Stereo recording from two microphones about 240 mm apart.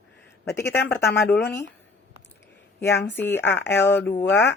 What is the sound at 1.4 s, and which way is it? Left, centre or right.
Speech, left.